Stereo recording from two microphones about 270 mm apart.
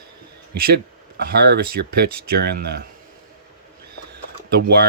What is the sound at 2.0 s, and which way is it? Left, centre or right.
Speech, right.